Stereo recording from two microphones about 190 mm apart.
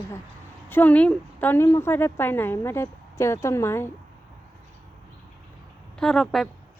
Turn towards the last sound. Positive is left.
turn(degrees=0)  # may be behind; listen again after turning